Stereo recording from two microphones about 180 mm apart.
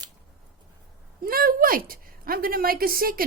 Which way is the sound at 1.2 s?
55° right (ahead or behind).